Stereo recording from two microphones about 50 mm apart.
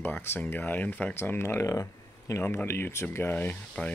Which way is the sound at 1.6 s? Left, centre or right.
Left.